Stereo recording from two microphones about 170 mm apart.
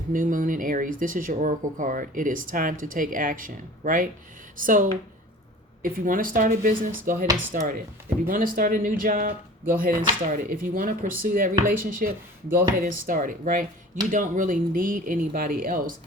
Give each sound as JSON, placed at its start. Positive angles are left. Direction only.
{"t": 0.1, "sound": "speech", "side_deg": -55}